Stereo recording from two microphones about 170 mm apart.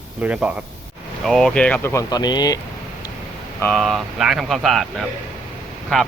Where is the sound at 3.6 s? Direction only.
5° left (ahead or behind).